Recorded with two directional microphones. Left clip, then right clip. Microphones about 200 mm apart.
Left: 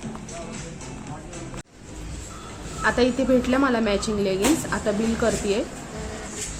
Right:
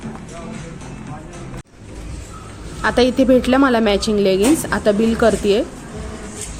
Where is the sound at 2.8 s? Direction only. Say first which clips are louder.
Right 6 dB; 40° right (ahead or behind).